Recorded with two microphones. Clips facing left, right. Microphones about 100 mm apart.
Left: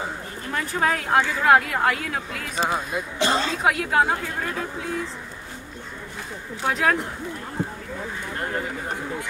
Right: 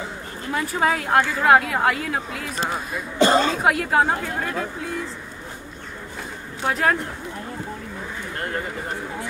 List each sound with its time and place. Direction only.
0.5 s speech: 5° right (ahead or behind)
3.2 s a woman's voice: 45° right (ahead or behind)
3.5 s speech: centre (ahead or behind)
6.6 s speech: centre (ahead or behind)